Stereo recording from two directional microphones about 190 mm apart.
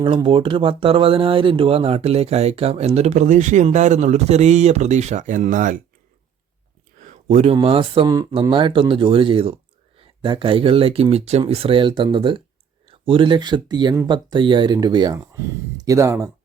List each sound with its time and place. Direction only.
0.0 s speech: 25° right (ahead or behind); by 5.8 s 45° right (ahead or behind)
7.0 s speech: 40° right (ahead or behind); by 16.3 s 15° right (ahead or behind)